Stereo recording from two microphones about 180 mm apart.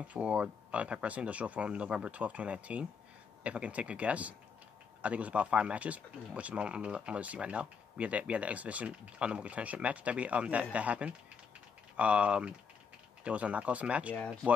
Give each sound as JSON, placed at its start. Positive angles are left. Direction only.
{"t": 0.1, "sound": "speech", "side_deg": -5}